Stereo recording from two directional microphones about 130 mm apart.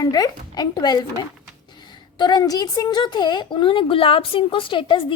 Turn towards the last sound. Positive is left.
turn(degrees=40)  # may be behind; listen again after turning